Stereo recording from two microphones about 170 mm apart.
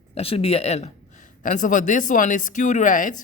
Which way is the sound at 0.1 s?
35° left (ahead or behind).